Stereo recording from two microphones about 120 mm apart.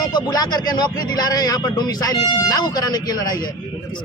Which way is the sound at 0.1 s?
35° left (ahead or behind).